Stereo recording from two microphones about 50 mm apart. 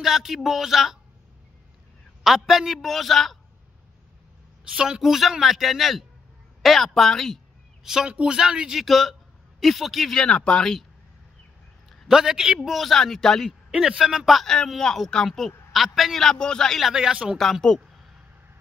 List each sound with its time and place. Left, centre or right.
0.0 s a man's voice: centre
2.2 s a man's voice: centre
4.7 s a woman's voice: centre
5.0 s a man's voice: centre
7.8 s a woman's voice: centre
8.7 s a man's voice: centre
10.1 s speech: centre
12.1 s speech: centre
12.6 s speech: centre
13.7 s a man's voice: centre
14.4 s a man's voice: centre
16.9 s speech: centre
17.4 s speech: centre